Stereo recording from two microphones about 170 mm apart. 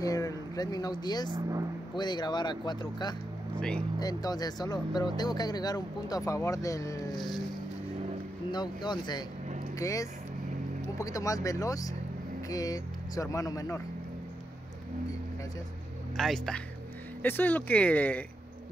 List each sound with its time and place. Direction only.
0.0 s a sound: 20° left (ahead or behind)
1.3 s speech: 20° right (ahead or behind)
2.0 s speech: 25° left (ahead or behind)
3.5 s speech: 5° left (ahead or behind)
4.0 s speech: 25° left (ahead or behind)
8.5 s speech: 25° left (ahead or behind)
16.2 s speech: 5° left (ahead or behind)